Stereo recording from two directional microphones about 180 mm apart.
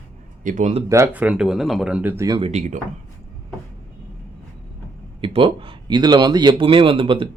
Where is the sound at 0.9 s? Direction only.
10° right (ahead or behind).